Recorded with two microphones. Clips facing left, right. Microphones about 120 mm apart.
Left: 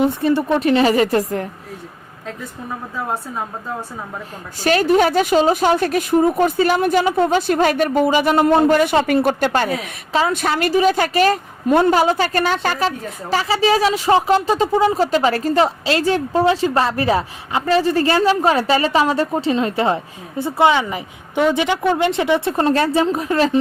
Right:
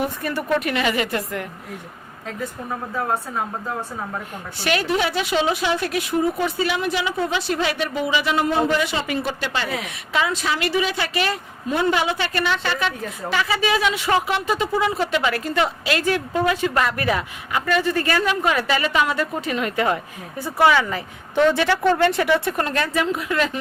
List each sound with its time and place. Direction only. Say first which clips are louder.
0.0 s speech: left 8 dB; 25° left (ahead or behind)
4.6 s a woman's voice: left 7 dB; 40° left (ahead or behind)
10.3 s a woman's voice: left 5 dB; 55° left (ahead or behind); by 23.6 s 35° left (ahead or behind)